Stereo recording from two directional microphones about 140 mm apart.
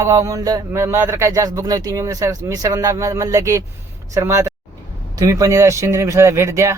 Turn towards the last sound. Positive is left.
turn(degrees=-20)  # may be behind; listen again after turning